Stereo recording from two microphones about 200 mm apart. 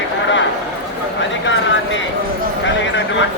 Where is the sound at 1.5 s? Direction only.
65° left (ahead or behind).